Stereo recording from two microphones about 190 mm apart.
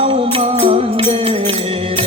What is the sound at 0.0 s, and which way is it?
Music, 30° right (ahead or behind).